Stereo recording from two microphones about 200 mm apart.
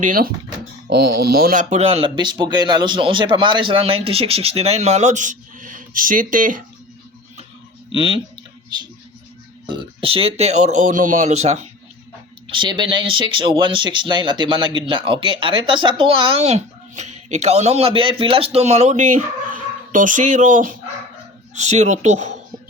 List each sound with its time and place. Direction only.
0.0 s speech: 45° right (ahead or behind)
7.9 s speech: 25° right (ahead or behind)
9.6 s speech: 25° right (ahead or behind)
12.5 s speech: 25° right (ahead or behind)